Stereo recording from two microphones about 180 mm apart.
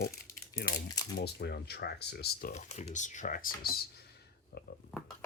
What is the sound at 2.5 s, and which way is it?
Speech, 40° left (ahead or behind).